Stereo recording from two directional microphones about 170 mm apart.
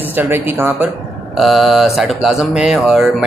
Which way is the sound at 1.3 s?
Centre (ahead or behind).